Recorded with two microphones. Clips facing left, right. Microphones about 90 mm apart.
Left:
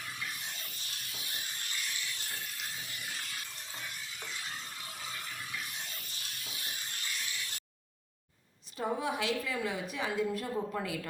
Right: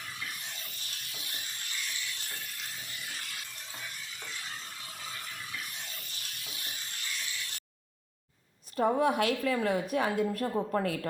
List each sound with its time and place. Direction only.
8.7 s a woman's voice: 55° right (ahead or behind)